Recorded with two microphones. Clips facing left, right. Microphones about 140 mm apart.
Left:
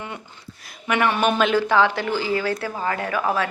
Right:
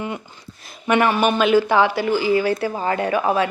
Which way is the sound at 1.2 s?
5° right (ahead or behind).